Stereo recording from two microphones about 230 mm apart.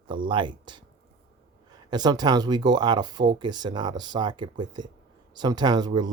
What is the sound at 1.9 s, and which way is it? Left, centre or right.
Speech, centre.